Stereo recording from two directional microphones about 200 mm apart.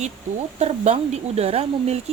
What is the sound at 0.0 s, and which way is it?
Speech, 35° right (ahead or behind).